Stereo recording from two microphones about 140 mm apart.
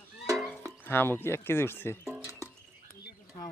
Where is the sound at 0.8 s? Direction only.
15° left (ahead or behind).